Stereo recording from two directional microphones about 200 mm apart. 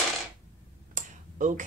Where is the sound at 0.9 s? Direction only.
40° right (ahead or behind).